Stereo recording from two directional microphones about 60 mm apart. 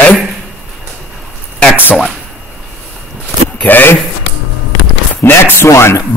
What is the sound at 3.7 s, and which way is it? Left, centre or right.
Speech, left.